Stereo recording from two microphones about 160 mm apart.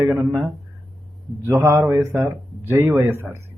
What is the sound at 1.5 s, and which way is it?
Speech, 15° right (ahead or behind).